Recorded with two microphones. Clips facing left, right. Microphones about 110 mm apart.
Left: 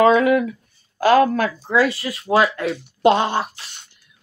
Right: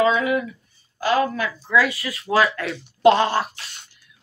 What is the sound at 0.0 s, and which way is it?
A woman's voice, 55° left (ahead or behind).